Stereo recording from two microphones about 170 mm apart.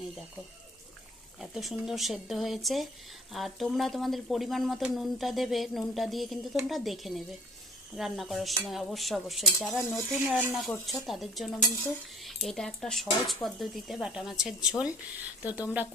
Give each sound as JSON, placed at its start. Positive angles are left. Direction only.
{"t": 1.4, "sound": "speech", "side_deg": -5}